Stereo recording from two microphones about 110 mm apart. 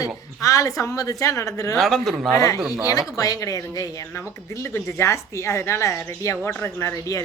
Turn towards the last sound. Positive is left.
turn(degrees=25)  # may be behind; listen again after turning